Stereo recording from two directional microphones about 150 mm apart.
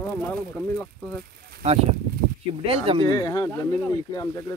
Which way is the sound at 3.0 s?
25° left (ahead or behind).